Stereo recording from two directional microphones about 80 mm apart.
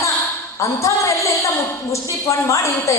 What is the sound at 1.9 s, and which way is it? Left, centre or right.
A woman's voice, left.